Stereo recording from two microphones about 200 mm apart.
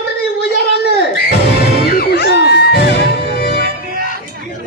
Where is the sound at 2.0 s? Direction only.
55° left (ahead or behind).